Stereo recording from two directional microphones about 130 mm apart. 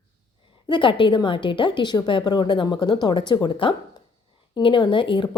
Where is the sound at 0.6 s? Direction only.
40° left (ahead or behind).